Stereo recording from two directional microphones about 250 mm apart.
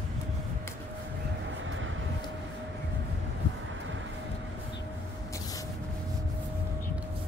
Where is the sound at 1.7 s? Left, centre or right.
Right.